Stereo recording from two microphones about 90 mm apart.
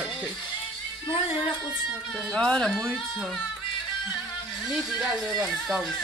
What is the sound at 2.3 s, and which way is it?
Speech, 10° left (ahead or behind).